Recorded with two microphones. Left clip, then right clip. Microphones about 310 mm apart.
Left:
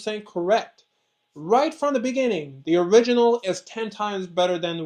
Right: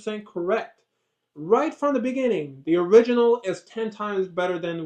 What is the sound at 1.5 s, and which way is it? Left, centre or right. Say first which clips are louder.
Speech: left 1 dB; left.